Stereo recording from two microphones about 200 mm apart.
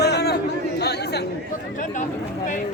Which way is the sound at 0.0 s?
55° left (ahead or behind).